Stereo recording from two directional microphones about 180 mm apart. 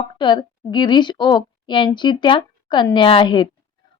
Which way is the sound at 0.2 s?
25° left (ahead or behind).